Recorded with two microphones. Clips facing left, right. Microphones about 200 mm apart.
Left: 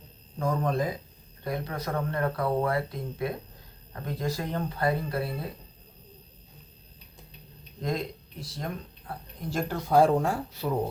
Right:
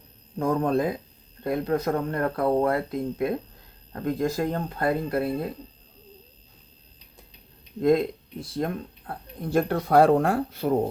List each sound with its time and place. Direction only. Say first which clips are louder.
0.3 s speech: right 5 dB; 55° right (ahead or behind)
7.8 s speech: right 11 dB; 55° right (ahead or behind)